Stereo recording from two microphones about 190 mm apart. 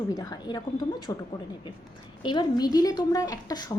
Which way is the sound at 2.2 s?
25° left (ahead or behind).